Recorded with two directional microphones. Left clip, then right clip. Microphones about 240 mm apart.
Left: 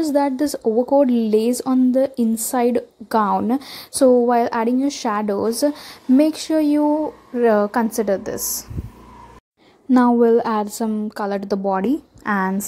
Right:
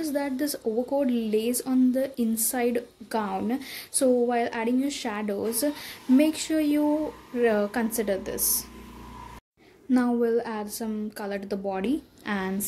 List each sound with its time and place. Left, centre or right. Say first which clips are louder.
0.0 s a woman's voice: left 10 dB; left
8.1 s a woman's voice: left 7 dB; centre
8.4 s a woman's voice: left 4 dB; left
9.8 s a woman's voice: left 10 dB; left
12.3 s a woman's voice: left 10 dB; centre